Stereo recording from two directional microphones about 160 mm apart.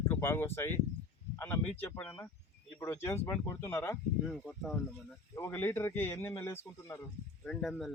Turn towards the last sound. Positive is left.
turn(degrees=0)  # may be behind; listen again after turning